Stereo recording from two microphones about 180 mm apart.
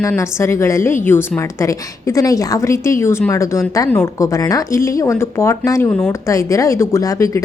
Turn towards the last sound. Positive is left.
turn(degrees=20)  # may be behind; listen again after turning